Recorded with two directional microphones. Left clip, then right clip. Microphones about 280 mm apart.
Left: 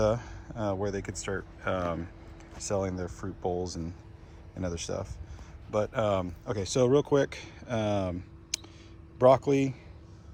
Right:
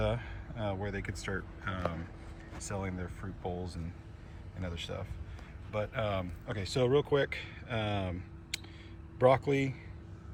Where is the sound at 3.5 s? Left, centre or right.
Left.